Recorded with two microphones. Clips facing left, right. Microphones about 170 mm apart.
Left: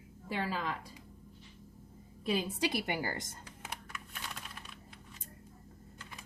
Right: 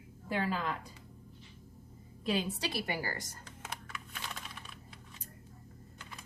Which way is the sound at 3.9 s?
Centre (ahead or behind).